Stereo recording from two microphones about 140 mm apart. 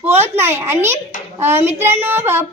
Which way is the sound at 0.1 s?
15° right (ahead or behind).